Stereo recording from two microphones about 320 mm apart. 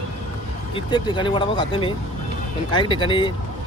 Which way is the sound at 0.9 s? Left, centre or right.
Centre.